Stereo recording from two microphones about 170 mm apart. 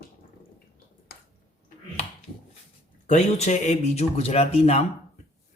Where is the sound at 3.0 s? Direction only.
40° left (ahead or behind).